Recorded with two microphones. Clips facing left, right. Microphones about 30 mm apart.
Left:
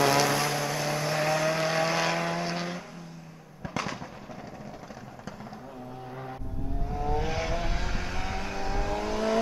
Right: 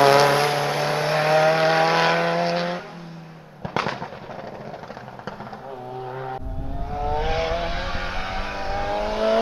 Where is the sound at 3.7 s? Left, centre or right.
Right.